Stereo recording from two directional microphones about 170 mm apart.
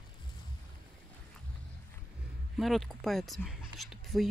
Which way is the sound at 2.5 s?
Centre (ahead or behind).